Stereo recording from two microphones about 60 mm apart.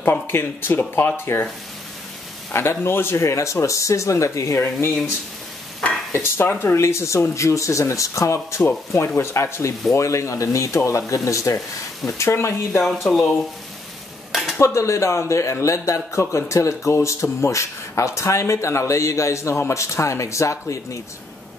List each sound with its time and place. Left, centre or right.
0.0 s speech: left
2.5 s a man's voice: left
6.1 s a man's voice: left
12.2 s speech: left
12.8 s speech: centre
14.3 s cutlery: centre
14.6 s a man's voice: left